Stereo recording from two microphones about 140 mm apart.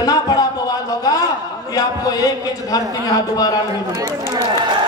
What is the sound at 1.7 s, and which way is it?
Speech, 25° left (ahead or behind).